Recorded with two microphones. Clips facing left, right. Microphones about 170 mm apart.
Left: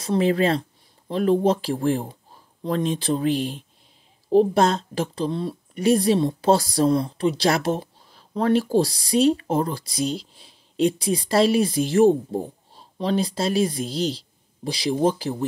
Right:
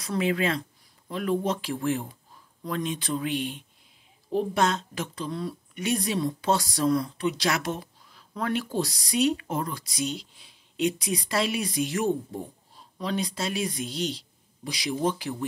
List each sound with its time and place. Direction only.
0.0 s speech: 30° left (ahead or behind)